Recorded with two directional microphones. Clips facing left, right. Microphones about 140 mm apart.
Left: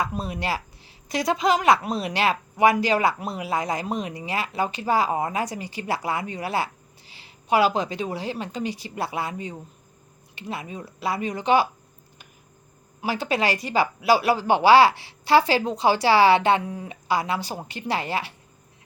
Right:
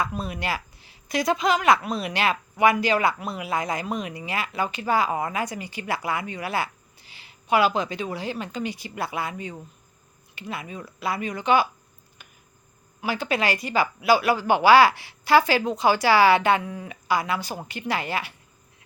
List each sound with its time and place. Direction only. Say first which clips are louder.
0.0 s a woman's voice: left 1 dB; 35° left (ahead or behind)
13.0 s a woman's voice: left 1 dB; 35° left (ahead or behind)